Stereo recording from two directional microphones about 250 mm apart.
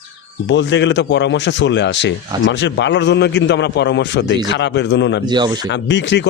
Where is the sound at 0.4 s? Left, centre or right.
Left.